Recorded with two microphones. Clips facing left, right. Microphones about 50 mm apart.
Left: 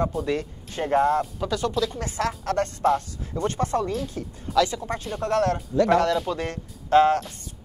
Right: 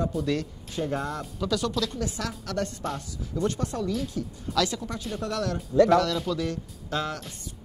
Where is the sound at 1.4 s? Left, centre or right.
Left.